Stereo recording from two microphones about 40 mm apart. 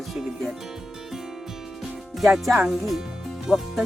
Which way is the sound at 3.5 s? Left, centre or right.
Centre.